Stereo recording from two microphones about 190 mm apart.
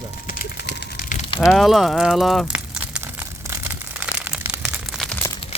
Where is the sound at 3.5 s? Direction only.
10° right (ahead or behind).